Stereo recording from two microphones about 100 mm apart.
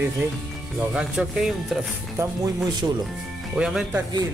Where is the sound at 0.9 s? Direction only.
10° right (ahead or behind).